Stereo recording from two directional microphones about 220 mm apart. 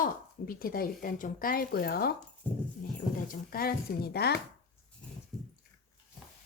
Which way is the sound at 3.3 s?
40° left (ahead or behind).